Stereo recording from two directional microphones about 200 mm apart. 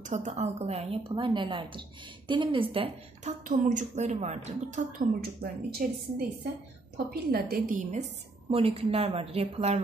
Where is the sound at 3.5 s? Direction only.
40° right (ahead or behind).